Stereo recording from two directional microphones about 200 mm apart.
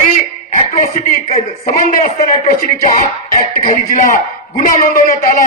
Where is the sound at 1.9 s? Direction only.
40° left (ahead or behind).